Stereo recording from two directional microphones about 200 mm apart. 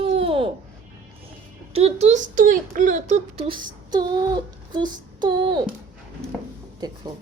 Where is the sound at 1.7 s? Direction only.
30° right (ahead or behind).